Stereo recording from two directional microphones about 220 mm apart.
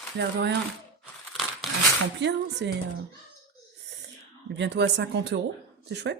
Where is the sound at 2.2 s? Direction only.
50° right (ahead or behind).